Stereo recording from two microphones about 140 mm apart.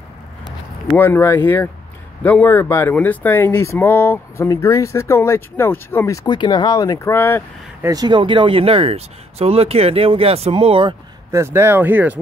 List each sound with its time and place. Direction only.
0.9 s speech: 15° left (ahead or behind)
7.8 s speech: 25° right (ahead or behind)
11.3 s speech: 15° right (ahead or behind)